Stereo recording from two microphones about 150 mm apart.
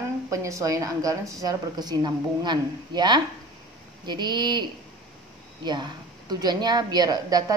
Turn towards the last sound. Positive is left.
turn(degrees=-25)  # may be behind; listen again after turning